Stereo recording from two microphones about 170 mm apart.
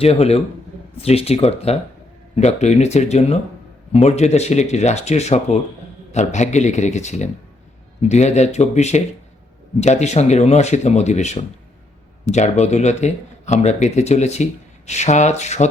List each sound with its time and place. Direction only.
0.0 s a man's voice: 35° left (ahead or behind)